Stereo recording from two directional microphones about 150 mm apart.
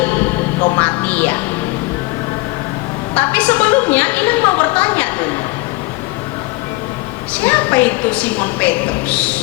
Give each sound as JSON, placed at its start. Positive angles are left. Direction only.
{"t": 0.8, "sound": "music", "side_deg": 10}
{"t": 3.2, "sound": "a sound", "side_deg": 10}
{"t": 7.3, "sound": "a woman's voice", "side_deg": 10}